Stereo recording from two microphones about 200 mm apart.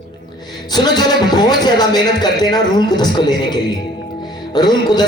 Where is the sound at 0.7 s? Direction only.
20° left (ahead or behind).